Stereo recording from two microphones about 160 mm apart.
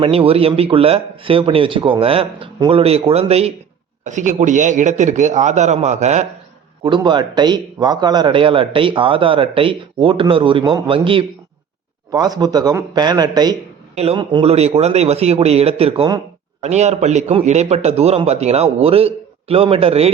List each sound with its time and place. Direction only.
0.0 s a man's voice: 35° right (ahead or behind)
4.0 s a man's voice: 50° right (ahead or behind)
6.8 s a man's voice: 30° right (ahead or behind)
13.9 s a man's voice: 40° right (ahead or behind)